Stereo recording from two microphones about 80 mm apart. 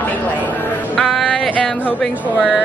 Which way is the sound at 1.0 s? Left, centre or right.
Centre.